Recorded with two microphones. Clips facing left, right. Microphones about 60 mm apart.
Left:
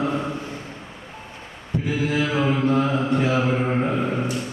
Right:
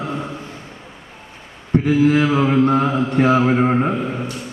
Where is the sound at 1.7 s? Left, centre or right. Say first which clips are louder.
Right 9 dB; right.